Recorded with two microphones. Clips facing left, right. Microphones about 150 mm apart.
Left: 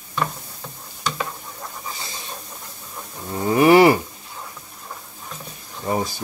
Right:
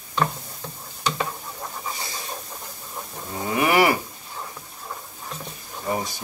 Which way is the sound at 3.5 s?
30° left (ahead or behind).